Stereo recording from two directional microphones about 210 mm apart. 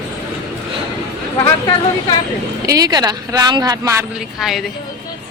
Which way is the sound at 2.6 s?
15° right (ahead or behind).